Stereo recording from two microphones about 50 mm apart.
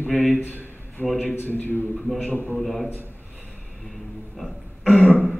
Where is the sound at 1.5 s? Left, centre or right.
Left.